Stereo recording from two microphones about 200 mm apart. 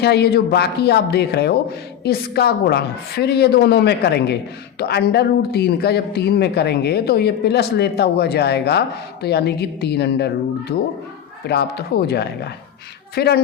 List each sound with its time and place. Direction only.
0.0 s a woman's voice: 55° left (ahead or behind)